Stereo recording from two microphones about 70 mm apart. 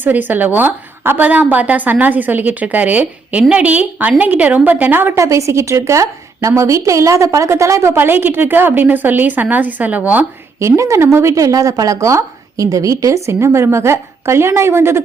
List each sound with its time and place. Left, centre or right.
0.0 s a woman's voice: right
5.1 s a woman's voice: right
7.9 s a woman's voice: right
10.6 s a woman's voice: right